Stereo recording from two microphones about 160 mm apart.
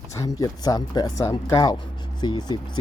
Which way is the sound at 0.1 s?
20° left (ahead or behind).